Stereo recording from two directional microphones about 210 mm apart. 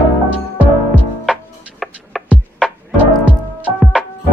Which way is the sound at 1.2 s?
Centre (ahead or behind).